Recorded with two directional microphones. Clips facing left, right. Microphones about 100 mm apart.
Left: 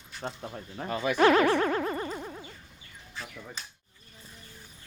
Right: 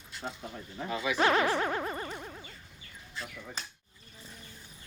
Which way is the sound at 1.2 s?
25° right (ahead or behind).